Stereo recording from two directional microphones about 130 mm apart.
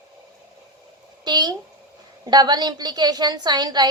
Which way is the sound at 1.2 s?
35° right (ahead or behind).